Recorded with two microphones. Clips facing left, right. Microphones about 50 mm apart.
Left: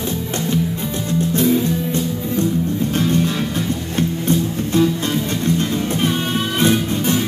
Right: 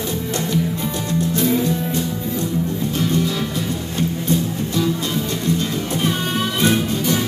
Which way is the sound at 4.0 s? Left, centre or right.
Left.